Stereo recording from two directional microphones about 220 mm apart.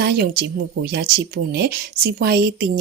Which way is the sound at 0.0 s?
45° right (ahead or behind).